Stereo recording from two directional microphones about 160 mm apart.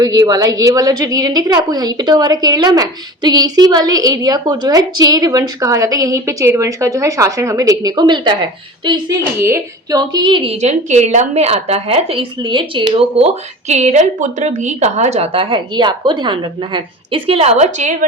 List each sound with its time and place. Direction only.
0.0 s a woman's voice: 25° right (ahead or behind); by 17.9 s 45° right (ahead or behind)